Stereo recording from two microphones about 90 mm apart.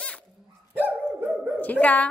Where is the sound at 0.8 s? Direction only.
15° right (ahead or behind).